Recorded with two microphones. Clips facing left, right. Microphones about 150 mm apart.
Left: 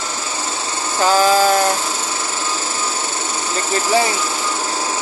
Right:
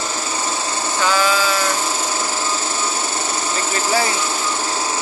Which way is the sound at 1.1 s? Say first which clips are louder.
Left 7 dB; 40° left (ahead or behind).